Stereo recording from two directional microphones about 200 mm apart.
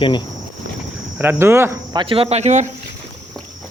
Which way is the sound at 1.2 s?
10° right (ahead or behind).